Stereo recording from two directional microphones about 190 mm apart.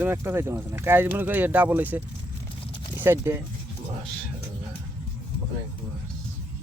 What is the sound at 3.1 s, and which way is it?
Speech, 15° right (ahead or behind).